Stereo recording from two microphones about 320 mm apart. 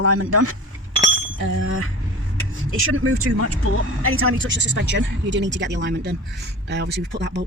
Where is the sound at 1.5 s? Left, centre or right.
Right.